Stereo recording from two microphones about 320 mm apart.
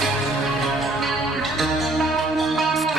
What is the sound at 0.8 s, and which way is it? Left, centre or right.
Music, centre.